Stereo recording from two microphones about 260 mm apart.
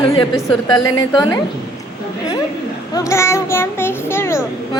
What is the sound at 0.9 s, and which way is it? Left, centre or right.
Speech, centre.